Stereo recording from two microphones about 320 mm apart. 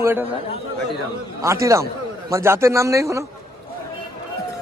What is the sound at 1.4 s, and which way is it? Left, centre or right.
A man's voice, centre.